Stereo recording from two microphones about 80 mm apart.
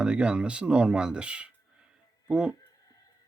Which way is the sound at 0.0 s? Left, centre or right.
Centre.